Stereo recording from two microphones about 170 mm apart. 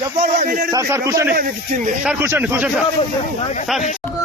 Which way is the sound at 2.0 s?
10° right (ahead or behind).